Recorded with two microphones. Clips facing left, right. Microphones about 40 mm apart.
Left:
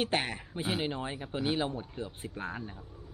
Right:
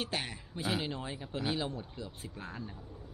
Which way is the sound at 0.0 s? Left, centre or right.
Left.